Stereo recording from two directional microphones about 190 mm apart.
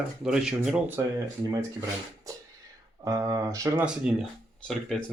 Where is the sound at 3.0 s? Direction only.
15° right (ahead or behind).